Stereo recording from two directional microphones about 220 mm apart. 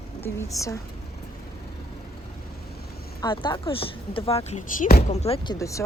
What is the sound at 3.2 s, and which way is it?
Speech, 20° left (ahead or behind).